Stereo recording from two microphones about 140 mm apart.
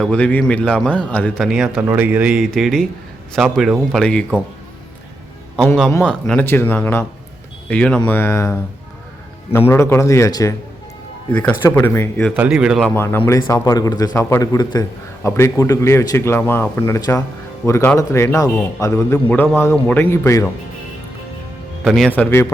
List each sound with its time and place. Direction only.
0.0 s speech: 10° left (ahead or behind)
1.5 s speech: 5° right (ahead or behind)
6.0 s a man's voice: 5° left (ahead or behind); by 10.5 s 20° left (ahead or behind)
11.3 s speech: 10° left (ahead or behind)
12.4 s speech: 10° right (ahead or behind)
12.8 s a man's voice: 15° left (ahead or behind)
21.8 s speech: centre (ahead or behind)
22.1 s speech: 15° left (ahead or behind)